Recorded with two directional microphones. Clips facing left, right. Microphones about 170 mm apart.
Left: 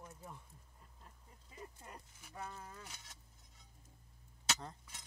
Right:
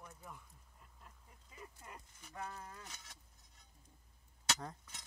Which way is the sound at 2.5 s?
5° left (ahead or behind).